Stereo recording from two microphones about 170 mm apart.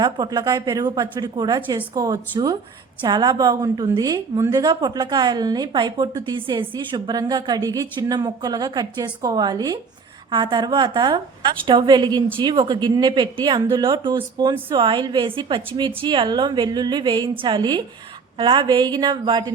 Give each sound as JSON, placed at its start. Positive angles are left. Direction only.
{"t": 0.0, "sound": "a woman's voice", "side_deg": -25}